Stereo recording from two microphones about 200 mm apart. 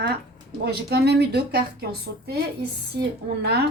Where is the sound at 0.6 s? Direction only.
55° right (ahead or behind).